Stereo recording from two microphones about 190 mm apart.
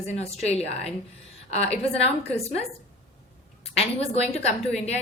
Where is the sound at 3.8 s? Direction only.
35° left (ahead or behind).